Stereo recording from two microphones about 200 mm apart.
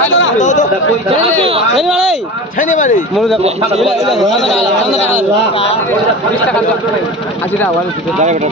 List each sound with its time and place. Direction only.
0.3 s speech: 35° left (ahead or behind)
1.2 s speech: 30° right (ahead or behind)
1.7 s a man's voice: centre (ahead or behind)
2.6 s speech: 40° left (ahead or behind)
3.8 s a man's voice: centre (ahead or behind)